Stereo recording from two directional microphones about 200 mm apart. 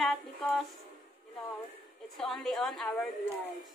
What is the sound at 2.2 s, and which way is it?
Speech, centre (ahead or behind).